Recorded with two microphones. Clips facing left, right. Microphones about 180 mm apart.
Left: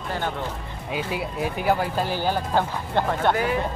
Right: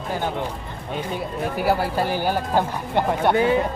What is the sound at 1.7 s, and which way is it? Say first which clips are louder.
Speech: right 2 dB; 5° right (ahead or behind).